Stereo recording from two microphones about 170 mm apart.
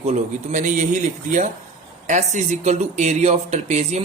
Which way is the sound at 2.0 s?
45° right (ahead or behind).